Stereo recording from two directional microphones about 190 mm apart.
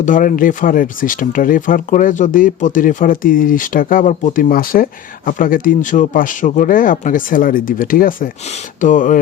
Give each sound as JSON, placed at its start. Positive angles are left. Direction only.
{"t": 0.0, "sound": "speech", "side_deg": 45}